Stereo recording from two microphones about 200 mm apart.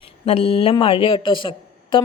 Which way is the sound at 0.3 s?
30° left (ahead or behind).